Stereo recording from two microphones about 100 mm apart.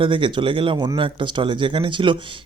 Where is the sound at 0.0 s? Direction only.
60° right (ahead or behind).